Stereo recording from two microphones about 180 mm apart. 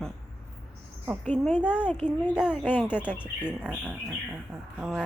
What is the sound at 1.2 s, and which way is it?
Speech, 5° left (ahead or behind).